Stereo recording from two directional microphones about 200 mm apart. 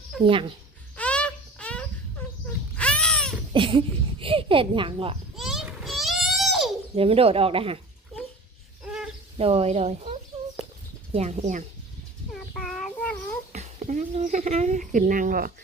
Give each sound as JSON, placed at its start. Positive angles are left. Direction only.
{"t": 0.3, "sound": "speech", "side_deg": -25}
{"t": 0.9, "sound": "a sound", "side_deg": 5}
{"t": 3.5, "sound": "speech", "side_deg": -25}
{"t": 5.4, "sound": "a sound", "side_deg": 0}
{"t": 6.9, "sound": "speech", "side_deg": -30}
{"t": 9.4, "sound": "speech", "side_deg": -30}
{"t": 12.3, "sound": "child singing", "side_deg": 0}
{"t": 13.5, "sound": "a woman's voice", "side_deg": -35}